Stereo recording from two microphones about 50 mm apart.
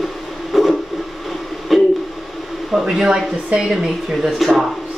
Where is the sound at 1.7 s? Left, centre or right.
Centre.